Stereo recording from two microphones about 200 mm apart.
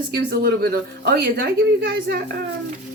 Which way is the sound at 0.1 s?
50° right (ahead or behind).